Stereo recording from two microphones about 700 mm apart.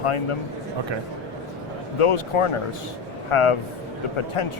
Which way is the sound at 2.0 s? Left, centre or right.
Left.